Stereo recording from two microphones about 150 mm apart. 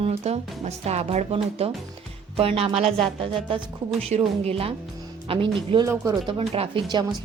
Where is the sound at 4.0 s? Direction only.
45° right (ahead or behind).